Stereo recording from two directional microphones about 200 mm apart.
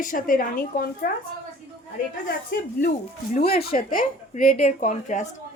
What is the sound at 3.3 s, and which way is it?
Speech, 30° left (ahead or behind).